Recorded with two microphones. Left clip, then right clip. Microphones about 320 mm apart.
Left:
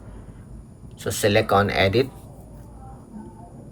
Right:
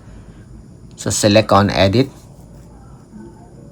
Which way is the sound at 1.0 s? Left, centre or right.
Centre.